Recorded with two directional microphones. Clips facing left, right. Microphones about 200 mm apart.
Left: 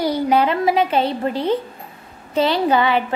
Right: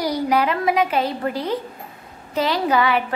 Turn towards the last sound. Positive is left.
turn(degrees=25)  # may be behind; listen again after turning